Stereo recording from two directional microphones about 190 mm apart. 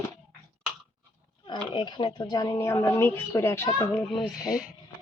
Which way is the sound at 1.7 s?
25° left (ahead or behind).